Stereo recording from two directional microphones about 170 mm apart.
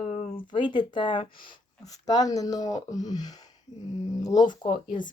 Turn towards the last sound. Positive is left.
turn(degrees=30)  # may be behind; listen again after turning